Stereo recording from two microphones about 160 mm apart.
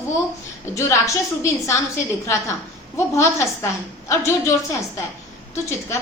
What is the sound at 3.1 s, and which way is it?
A woman's voice, 15° left (ahead or behind).